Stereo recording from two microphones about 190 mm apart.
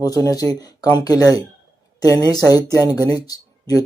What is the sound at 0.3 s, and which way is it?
A woman's voice, 20° left (ahead or behind).